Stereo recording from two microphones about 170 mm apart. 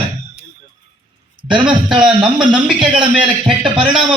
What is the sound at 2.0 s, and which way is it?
Speech, 5° right (ahead or behind).